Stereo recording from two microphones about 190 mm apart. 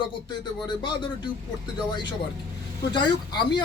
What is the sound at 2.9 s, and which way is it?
Speech, 25° left (ahead or behind).